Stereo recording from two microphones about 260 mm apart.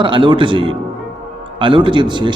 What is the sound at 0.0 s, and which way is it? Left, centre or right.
A man's voice, centre.